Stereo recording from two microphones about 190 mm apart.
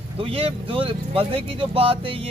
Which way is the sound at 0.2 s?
30° right (ahead or behind).